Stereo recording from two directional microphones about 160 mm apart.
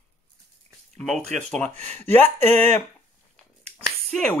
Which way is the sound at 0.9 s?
Centre (ahead or behind).